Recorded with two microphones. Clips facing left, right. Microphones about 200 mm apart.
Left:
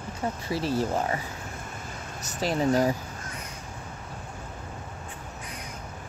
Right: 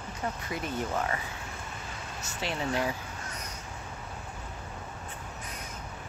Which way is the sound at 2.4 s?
40° left (ahead or behind).